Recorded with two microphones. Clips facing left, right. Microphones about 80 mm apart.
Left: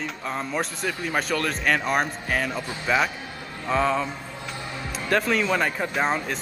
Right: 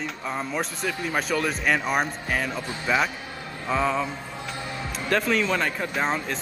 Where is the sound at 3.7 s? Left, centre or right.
Centre.